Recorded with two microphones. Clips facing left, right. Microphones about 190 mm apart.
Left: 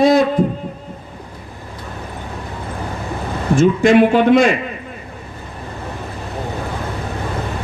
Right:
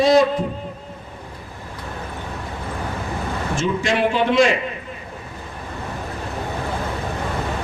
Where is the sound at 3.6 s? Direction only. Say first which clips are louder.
Left 10 dB; 55° left (ahead or behind).